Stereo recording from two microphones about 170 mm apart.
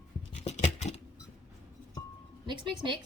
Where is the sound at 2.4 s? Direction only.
25° right (ahead or behind).